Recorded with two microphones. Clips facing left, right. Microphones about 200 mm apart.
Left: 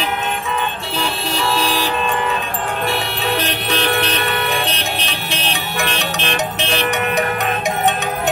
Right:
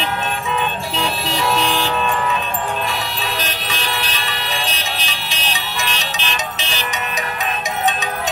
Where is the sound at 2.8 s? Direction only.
60° left (ahead or behind).